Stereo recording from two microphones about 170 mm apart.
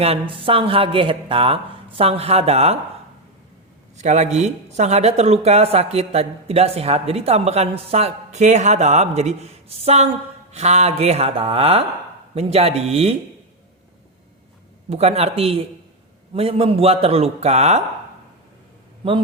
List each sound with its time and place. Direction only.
0.0 s speech: 35° right (ahead or behind)
3.9 s speech: 45° right (ahead or behind)
14.8 s speech: 40° right (ahead or behind)